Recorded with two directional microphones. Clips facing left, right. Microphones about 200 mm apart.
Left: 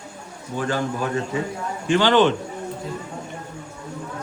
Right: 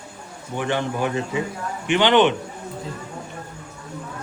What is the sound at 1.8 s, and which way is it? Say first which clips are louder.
Speech: even; 20° right (ahead or behind).